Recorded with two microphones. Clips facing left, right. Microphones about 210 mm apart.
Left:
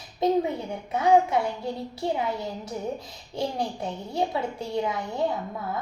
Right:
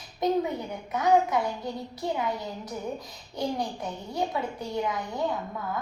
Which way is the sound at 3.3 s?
30° left (ahead or behind).